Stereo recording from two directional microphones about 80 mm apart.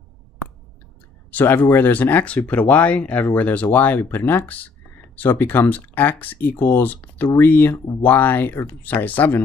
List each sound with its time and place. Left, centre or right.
1.3 s speech: left